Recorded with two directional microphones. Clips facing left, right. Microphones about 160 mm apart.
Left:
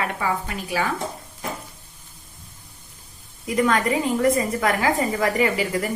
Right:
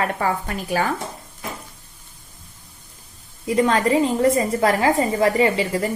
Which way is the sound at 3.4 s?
30° right (ahead or behind).